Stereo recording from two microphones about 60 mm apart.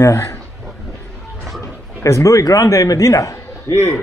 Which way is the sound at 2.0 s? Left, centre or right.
Left.